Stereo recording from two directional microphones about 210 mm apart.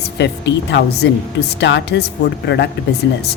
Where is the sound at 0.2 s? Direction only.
55° left (ahead or behind).